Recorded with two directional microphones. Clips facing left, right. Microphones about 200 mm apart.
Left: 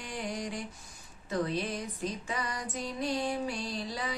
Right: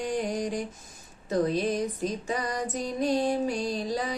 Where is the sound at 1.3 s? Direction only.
40° right (ahead or behind).